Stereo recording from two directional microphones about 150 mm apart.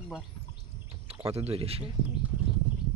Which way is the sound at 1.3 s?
40° right (ahead or behind).